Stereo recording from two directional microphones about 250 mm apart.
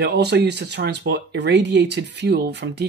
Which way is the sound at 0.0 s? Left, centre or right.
Right.